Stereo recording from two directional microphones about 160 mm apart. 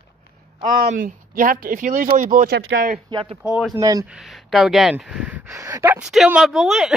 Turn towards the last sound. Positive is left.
turn(degrees=0)  # may be behind; listen again after turning